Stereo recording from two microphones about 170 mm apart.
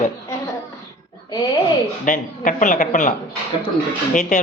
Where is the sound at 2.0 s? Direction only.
50° left (ahead or behind).